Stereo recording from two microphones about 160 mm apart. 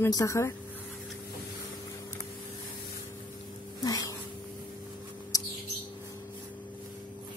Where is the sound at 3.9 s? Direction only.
20° left (ahead or behind).